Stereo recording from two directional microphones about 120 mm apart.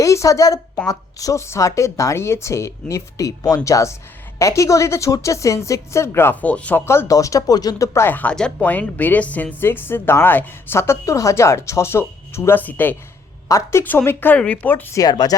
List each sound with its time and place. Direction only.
0.0 s a woman's voice: 25° left (ahead or behind)
14.9 s speech: 35° left (ahead or behind)